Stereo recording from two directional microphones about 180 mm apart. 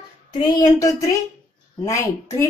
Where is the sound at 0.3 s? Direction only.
25° left (ahead or behind).